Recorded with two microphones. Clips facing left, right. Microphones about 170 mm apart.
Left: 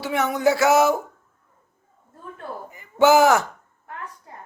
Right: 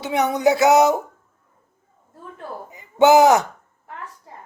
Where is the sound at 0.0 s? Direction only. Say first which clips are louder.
Right 2 dB; 20° right (ahead or behind).